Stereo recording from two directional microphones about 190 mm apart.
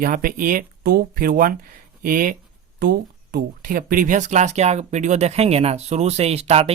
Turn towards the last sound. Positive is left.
turn(degrees=-30)  # may be behind; listen again after turning